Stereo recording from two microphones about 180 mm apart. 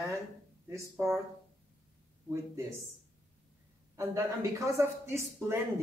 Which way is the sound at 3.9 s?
15° right (ahead or behind).